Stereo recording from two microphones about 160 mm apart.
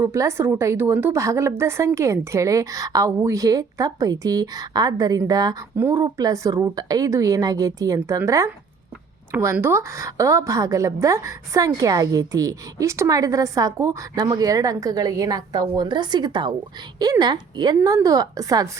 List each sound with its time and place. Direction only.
0.0 s a woman's voice: 20° right (ahead or behind)